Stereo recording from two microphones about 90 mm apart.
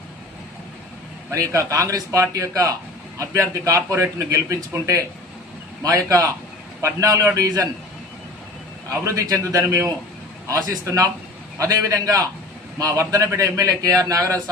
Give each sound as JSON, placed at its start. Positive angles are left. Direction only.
{"t": 1.3, "sound": "speech", "side_deg": -35}
{"t": 9.0, "sound": "speech", "side_deg": -40}